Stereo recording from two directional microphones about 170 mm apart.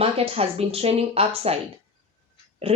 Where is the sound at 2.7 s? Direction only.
35° right (ahead or behind).